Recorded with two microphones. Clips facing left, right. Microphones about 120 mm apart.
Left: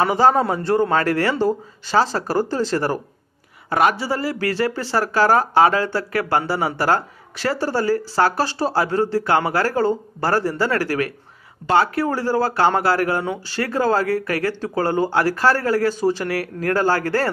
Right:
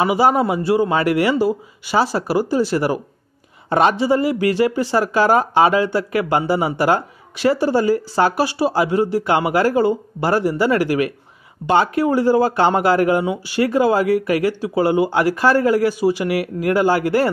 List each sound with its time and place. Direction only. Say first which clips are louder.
0.0 s speech: right 1 dB; 10° right (ahead or behind)
3.7 s speech: right 4 dB; 25° right (ahead or behind)